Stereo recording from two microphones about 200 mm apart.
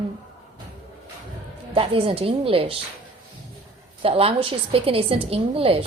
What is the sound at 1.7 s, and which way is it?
A woman's voice, 25° right (ahead or behind).